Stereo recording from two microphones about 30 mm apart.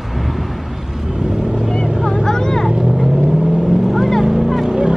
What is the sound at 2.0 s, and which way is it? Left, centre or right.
Vehicle, centre.